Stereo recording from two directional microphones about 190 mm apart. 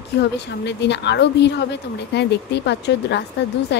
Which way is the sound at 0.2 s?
65° left (ahead or behind).